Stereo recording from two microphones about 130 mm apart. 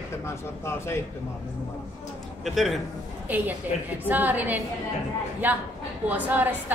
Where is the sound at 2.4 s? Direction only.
Centre (ahead or behind).